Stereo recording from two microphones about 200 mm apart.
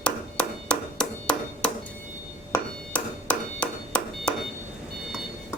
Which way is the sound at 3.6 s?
5° left (ahead or behind).